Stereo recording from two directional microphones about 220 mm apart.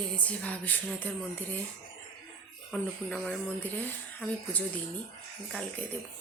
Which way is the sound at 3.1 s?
5° left (ahead or behind).